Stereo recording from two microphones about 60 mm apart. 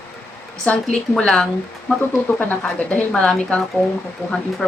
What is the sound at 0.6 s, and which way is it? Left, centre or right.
Speech, centre.